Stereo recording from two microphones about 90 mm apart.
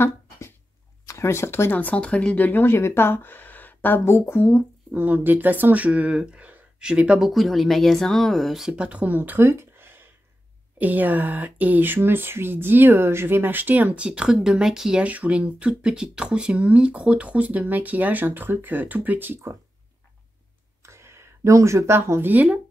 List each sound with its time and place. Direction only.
1.0 s speech: 30° left (ahead or behind)
4.9 s speech: 20° right (ahead or behind)
20.8 s speech: 30° right (ahead or behind)